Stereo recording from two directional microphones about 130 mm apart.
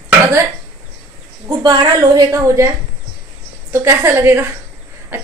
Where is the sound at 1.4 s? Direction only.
30° right (ahead or behind).